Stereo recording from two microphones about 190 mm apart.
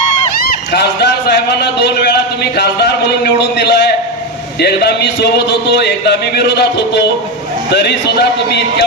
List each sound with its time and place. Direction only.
0.4 s a man's voice: 60° left (ahead or behind)